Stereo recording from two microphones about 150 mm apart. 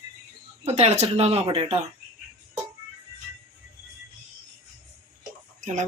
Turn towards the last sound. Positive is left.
turn(degrees=-55)  # may be behind; listen again after turning